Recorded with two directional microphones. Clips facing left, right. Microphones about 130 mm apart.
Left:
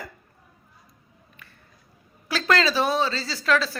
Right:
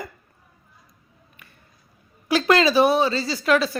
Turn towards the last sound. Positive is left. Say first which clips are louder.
# right 3 dB
turn(degrees=-15)  # may be behind; listen again after turning